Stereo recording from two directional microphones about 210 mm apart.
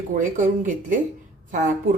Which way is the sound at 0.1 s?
40° right (ahead or behind).